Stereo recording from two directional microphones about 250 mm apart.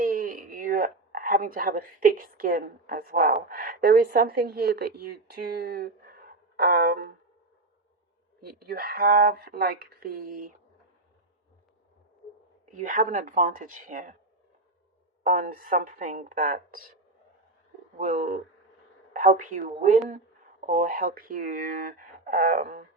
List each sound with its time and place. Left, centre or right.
0.0 s a sound: right
3.5 s a woman's voice: right
8.4 s a woman's voice: right
12.7 s a woman's voice: right
15.2 s a woman's voice: right
17.9 s a woman's voice: right